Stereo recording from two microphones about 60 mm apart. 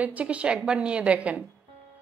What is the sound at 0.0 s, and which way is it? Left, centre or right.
A woman's voice, right.